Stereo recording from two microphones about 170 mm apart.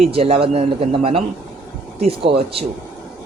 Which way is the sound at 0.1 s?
35° right (ahead or behind).